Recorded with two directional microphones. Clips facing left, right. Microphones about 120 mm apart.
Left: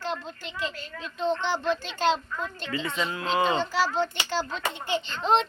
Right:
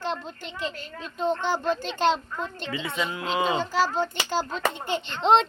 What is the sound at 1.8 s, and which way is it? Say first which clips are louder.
Speech: right 2 dB; 50° right (ahead or behind).